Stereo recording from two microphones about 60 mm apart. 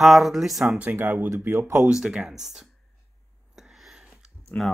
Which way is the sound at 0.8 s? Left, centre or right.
Right.